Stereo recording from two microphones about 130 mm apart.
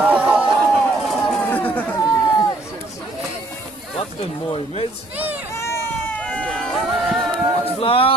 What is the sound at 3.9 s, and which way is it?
Speech, 50° left (ahead or behind).